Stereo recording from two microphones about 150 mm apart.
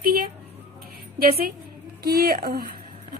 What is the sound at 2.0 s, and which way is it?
Speech, 80° right.